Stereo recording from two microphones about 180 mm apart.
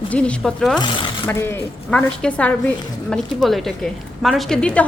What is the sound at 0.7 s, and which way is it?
Speech, 25° left (ahead or behind).